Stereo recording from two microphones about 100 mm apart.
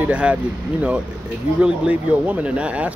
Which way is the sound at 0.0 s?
10° right (ahead or behind).